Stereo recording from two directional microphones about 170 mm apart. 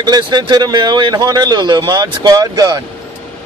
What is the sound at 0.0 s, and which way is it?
Speech, 25° right (ahead or behind).